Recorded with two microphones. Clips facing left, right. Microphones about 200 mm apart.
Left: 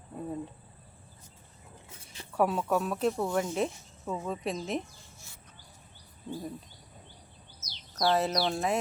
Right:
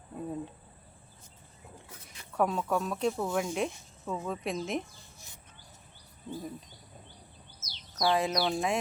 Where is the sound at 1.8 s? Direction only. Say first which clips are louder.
Left 2 dB; 30° left (ahead or behind).